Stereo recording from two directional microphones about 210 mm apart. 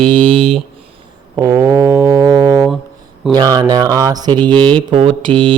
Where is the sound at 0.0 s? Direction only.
25° right (ahead or behind).